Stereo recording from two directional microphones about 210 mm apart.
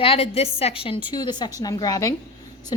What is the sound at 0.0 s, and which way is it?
A woman's voice, 25° left (ahead or behind).